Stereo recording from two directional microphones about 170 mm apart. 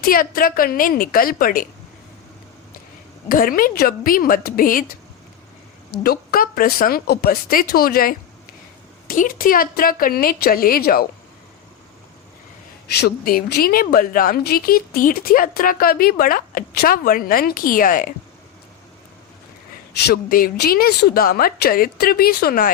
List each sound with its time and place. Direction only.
0.0 s a woman's voice: 60° left (ahead or behind)
3.2 s a woman's voice: 55° left (ahead or behind)
6.0 s a woman's voice: 60° left (ahead or behind)
13.0 s a woman's voice: 60° left (ahead or behind)
20.1 s a woman's voice: 65° left (ahead or behind)